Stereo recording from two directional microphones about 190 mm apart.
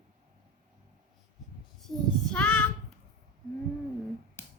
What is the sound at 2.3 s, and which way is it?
Child singing, 10° left (ahead or behind).